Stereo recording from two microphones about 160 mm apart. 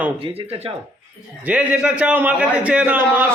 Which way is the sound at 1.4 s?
10° right (ahead or behind).